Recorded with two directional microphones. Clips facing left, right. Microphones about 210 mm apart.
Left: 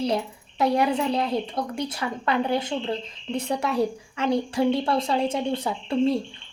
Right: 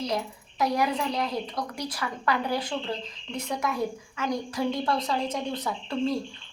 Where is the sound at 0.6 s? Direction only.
30° left (ahead or behind).